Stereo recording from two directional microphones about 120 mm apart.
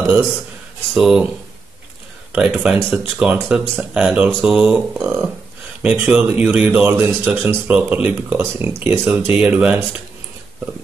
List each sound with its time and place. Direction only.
0.9 s speech: 5° right (ahead or behind)
2.3 s speech: 5° right (ahead or behind)
8.5 s speech: 15° right (ahead or behind)